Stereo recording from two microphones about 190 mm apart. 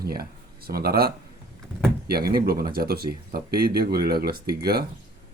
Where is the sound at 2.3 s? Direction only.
50° right (ahead or behind).